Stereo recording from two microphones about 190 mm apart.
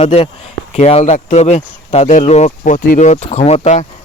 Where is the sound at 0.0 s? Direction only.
35° left (ahead or behind).